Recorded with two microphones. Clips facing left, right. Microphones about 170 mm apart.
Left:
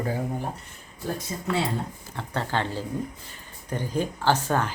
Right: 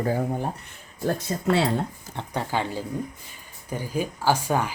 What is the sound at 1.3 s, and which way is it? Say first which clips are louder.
Speech: right 5 dB; 65° right (ahead or behind).